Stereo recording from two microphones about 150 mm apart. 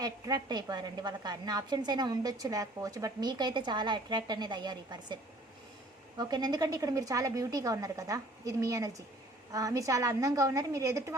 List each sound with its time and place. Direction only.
0.0 s a woman's voice: 25° right (ahead or behind)
6.1 s a woman's voice: 25° right (ahead or behind)